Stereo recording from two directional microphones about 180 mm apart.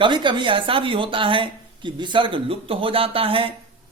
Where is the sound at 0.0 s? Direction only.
25° right (ahead or behind).